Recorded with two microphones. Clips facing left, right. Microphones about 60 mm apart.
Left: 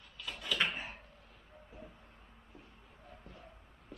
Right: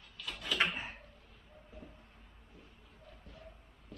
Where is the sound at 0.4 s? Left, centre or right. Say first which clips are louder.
Right 1 dB; centre.